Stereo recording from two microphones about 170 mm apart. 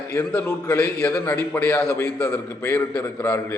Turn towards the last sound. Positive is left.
turn(degrees=10)  # may be behind; listen again after turning